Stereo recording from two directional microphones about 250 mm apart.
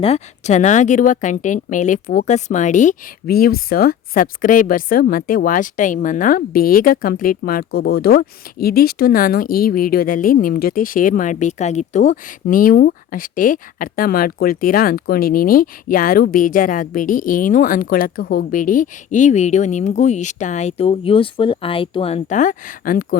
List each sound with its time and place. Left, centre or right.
0.0 s speech: left